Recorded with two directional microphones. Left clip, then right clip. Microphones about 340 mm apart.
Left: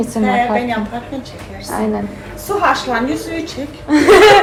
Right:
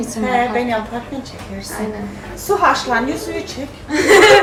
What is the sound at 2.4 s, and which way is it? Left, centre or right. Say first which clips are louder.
Speech: even; right.